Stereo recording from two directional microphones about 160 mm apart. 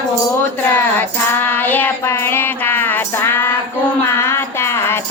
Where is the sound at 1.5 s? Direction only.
10° left (ahead or behind).